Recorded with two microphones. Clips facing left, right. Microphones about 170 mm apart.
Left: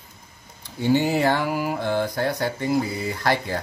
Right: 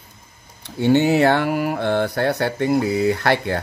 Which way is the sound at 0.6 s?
70° right (ahead or behind).